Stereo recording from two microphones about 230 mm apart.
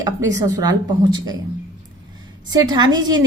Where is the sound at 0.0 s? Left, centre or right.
Centre.